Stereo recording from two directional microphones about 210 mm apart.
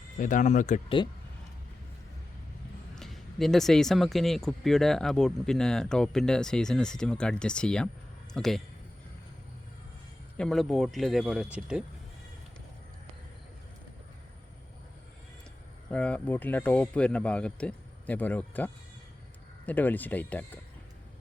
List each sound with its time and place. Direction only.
0.2 s speech: 35° left (ahead or behind)
2.9 s a man's voice: centre (ahead or behind)
10.3 s speech: centre (ahead or behind)
15.9 s speech: 5° left (ahead or behind)